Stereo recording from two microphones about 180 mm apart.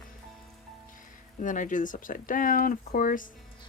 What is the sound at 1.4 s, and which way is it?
Speech, 45° left (ahead or behind).